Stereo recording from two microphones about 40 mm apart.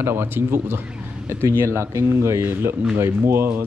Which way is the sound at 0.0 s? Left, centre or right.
Right.